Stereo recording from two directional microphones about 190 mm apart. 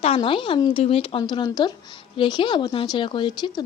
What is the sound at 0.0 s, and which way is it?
A woman's voice, 30° left (ahead or behind).